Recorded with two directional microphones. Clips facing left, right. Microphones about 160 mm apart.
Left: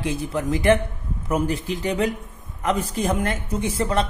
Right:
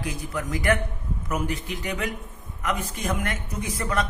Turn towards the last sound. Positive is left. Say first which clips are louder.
# left 5 dB
turn(degrees=30)  # may be behind; listen again after turning